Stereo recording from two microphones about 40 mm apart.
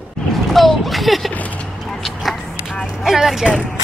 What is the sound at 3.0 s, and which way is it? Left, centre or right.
Speech, centre.